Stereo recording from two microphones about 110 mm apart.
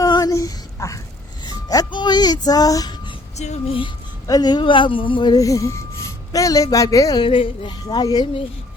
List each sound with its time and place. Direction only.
0.0 s a sound: 35° left (ahead or behind)
1.5 s speech: 35° left (ahead or behind)
3.3 s music: 90° left
4.3 s speech: 40° left (ahead or behind)
7.2 s a woman's voice: 55° left (ahead or behind)